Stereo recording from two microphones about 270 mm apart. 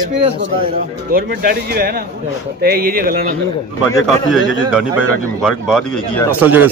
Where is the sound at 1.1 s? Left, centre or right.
Right.